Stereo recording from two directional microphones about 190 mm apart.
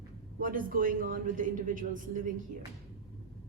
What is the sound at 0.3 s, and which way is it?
A woman's voice, 50° right (ahead or behind).